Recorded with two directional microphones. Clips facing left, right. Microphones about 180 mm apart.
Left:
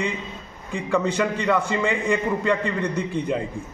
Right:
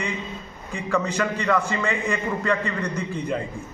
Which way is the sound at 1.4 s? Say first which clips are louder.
Left 1 dB; 15° left (ahead or behind).